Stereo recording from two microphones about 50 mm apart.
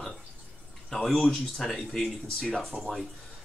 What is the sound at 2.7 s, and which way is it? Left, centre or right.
Speech, right.